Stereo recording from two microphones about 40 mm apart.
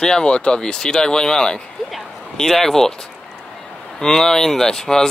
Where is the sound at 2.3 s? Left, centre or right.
Centre.